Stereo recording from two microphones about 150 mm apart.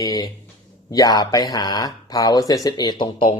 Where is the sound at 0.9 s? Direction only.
25° left (ahead or behind).